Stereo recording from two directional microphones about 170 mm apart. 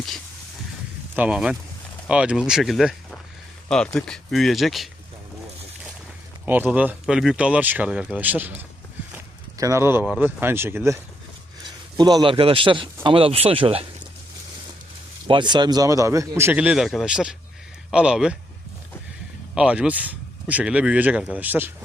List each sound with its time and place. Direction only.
1.1 s a man's voice: 5° right (ahead or behind)
6.4 s speech: 10° right (ahead or behind)
11.9 s speech: 25° right (ahead or behind)
15.3 s a man's voice: 25° right (ahead or behind); by 18.3 s 5° right (ahead or behind)
19.5 s speech: 5° right (ahead or behind)